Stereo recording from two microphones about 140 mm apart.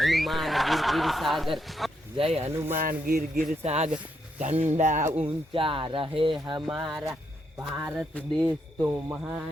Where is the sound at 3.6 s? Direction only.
50° right (ahead or behind).